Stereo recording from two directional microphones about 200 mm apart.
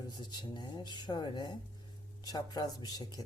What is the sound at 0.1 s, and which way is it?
Speech, 20° left (ahead or behind).